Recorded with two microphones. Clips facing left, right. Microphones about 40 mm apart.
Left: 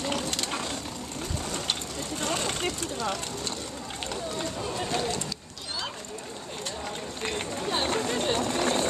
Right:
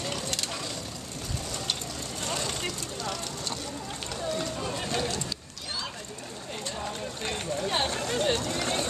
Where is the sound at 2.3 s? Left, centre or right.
Centre.